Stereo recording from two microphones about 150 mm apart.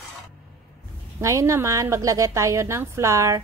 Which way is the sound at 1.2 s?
20° right (ahead or behind).